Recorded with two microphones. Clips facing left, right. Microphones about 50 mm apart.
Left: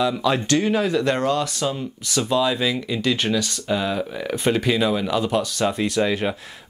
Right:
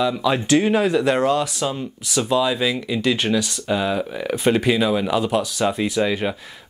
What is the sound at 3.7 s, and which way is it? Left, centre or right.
Speech, centre.